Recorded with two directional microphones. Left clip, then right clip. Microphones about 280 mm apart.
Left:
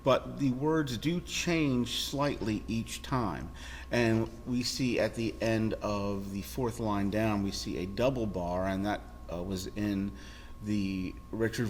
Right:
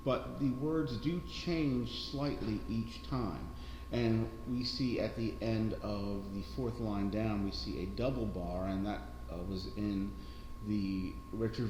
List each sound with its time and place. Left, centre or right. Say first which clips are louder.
0.0 s speech: left 7 dB; left
4.5 s speech: left 6 dB; left